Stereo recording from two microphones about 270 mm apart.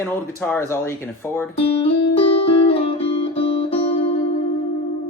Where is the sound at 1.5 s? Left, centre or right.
Left.